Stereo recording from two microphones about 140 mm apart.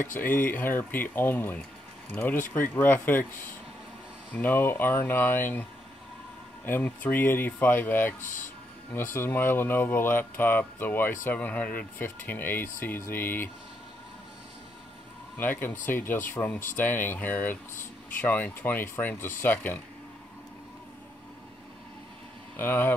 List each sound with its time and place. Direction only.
0.1 s speech: 15° left (ahead or behind)
4.3 s speech: 10° left (ahead or behind)
15.3 s speech: 15° left (ahead or behind)
22.6 s speech: 15° left (ahead or behind)